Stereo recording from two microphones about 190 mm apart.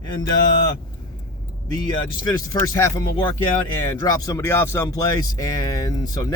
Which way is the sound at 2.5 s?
15° left (ahead or behind).